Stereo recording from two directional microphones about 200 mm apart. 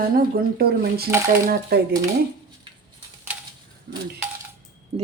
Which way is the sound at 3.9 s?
50° right (ahead or behind).